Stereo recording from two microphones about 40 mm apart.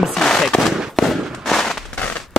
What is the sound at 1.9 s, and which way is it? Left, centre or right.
Firecracker, left.